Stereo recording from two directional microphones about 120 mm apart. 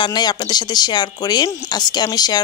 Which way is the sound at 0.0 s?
35° left (ahead or behind).